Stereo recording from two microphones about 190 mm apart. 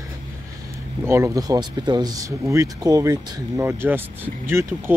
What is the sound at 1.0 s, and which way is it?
Speech, 15° right (ahead or behind).